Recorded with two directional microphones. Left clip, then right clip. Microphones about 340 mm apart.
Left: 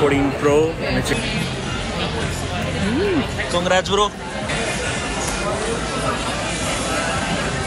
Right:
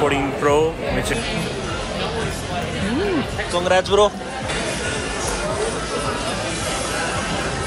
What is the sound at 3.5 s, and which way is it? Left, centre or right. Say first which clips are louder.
Speech: right 1 dB; centre.